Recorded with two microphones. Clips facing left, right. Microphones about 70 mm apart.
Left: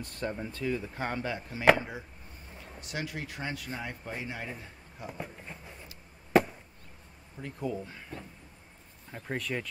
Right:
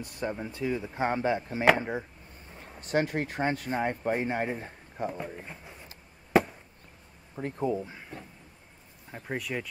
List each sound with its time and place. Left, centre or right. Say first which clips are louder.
0.0 s speech: right 2 dB; centre; by 5.1 s right
7.3 s speech: right 5 dB; right
9.1 s speech: right 1 dB; centre